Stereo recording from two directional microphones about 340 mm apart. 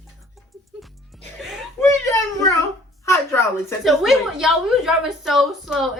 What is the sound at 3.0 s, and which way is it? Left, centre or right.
A woman's voice, centre.